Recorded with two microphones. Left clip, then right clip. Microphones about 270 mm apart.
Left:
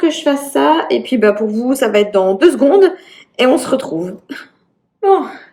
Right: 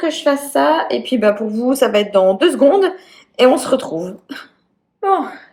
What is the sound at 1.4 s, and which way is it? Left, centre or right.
Speech, centre.